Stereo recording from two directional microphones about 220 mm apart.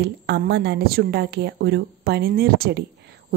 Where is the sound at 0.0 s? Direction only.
50° right (ahead or behind).